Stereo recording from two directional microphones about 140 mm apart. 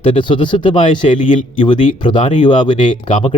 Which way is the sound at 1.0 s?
50° left (ahead or behind).